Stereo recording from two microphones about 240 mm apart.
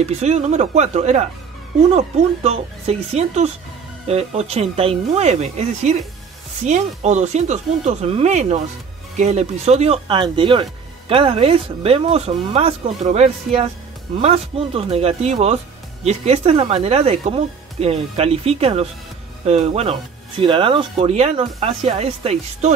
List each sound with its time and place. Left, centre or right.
0.0 s speech: right